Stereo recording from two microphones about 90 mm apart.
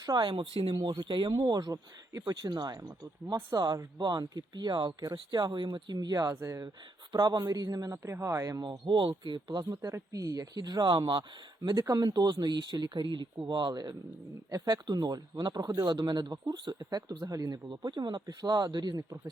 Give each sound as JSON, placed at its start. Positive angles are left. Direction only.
{"t": 0.0, "sound": "speech", "side_deg": -45}
{"t": 0.3, "sound": "speech", "side_deg": -80}
{"t": 0.7, "sound": "a man's voice", "side_deg": -55}
{"t": 7.1, "sound": "a man's voice", "side_deg": -50}
{"t": 8.8, "sound": "speech", "side_deg": -65}
{"t": 9.6, "sound": "speech", "side_deg": -35}
{"t": 11.7, "sound": "speech", "side_deg": -40}
{"t": 17.7, "sound": "speech", "side_deg": -55}